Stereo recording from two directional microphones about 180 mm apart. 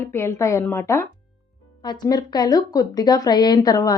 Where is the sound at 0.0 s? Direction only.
15° left (ahead or behind).